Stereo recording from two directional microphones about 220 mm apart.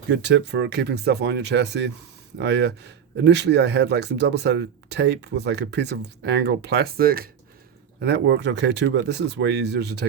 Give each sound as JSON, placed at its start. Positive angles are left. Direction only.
{"t": 0.1, "sound": "speech", "side_deg": -50}